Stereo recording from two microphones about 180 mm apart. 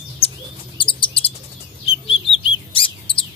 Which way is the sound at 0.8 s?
30° left (ahead or behind).